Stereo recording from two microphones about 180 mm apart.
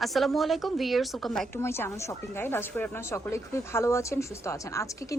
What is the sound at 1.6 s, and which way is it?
A woman's voice, 15° left (ahead or behind).